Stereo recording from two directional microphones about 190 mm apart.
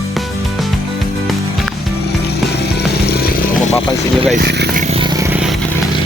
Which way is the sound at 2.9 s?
55° left (ahead or behind).